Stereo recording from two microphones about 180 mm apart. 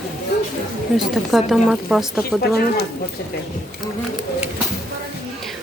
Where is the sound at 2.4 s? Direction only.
60° left (ahead or behind).